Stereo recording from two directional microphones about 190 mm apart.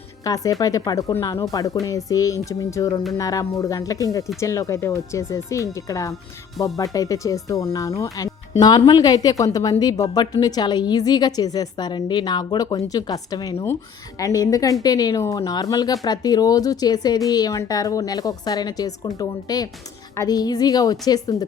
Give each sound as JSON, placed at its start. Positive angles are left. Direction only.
{"t": 0.3, "sound": "a woman's voice", "side_deg": 20}